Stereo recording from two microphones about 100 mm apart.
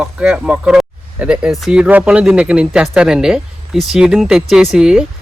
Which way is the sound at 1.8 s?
15° right (ahead or behind).